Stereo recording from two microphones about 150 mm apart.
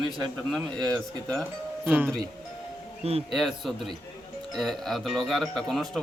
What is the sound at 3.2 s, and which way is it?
Speech, centre (ahead or behind).